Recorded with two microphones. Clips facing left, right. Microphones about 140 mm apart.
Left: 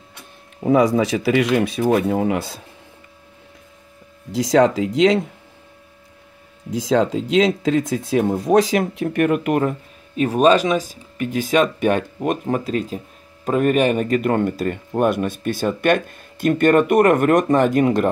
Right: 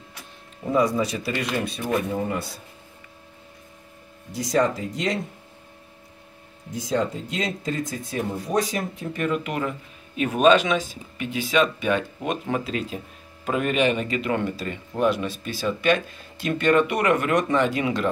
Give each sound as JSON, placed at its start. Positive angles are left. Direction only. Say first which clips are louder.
{"t": 0.7, "sound": "speech", "louder": "left 6 dB", "side_deg": 85}
{"t": 4.3, "sound": "speech", "louder": "left 7 dB", "side_deg": 90}
{"t": 6.7, "sound": "speech", "louder": "left 7 dB", "side_deg": 90}